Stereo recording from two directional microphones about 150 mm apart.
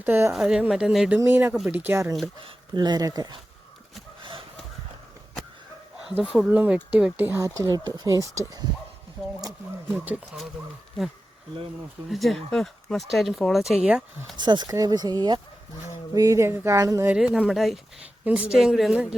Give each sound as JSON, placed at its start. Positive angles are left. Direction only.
{"t": 0.0, "sound": "speech", "side_deg": -15}
{"t": 0.3, "sound": "speech", "side_deg": -5}
{"t": 1.2, "sound": "speech", "side_deg": -15}
{"t": 2.4, "sound": "speech", "side_deg": -30}
{"t": 6.1, "sound": "speech", "side_deg": -5}
{"t": 9.9, "sound": "speech", "side_deg": -10}
{"t": 12.0, "sound": "speech", "side_deg": 0}
{"t": 14.3, "sound": "speech", "side_deg": -30}
{"t": 17.1, "sound": "speech", "side_deg": -5}